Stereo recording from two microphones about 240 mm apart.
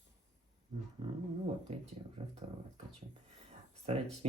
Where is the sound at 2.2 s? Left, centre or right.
Right.